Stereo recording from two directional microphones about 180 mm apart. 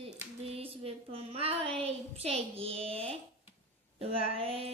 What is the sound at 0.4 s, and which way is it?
Child singing, 35° right (ahead or behind).